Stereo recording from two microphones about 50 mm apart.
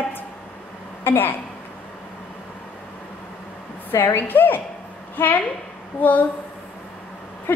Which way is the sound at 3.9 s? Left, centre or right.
Left.